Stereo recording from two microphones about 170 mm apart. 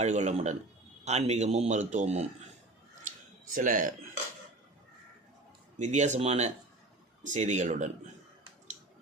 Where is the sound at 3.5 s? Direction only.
50° right (ahead or behind).